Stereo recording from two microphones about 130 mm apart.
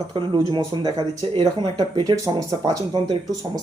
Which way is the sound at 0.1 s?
40° right (ahead or behind).